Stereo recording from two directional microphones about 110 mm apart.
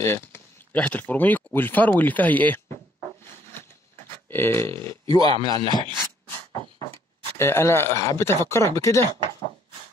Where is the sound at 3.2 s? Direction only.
20° left (ahead or behind).